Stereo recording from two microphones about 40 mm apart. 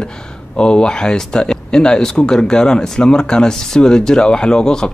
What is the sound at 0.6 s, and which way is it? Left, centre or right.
Speech, left.